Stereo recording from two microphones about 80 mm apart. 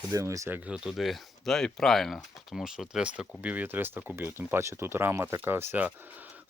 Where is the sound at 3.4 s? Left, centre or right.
Right.